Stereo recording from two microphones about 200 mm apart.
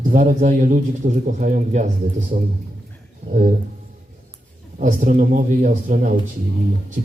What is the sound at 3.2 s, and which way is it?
Speech, 40° right (ahead or behind).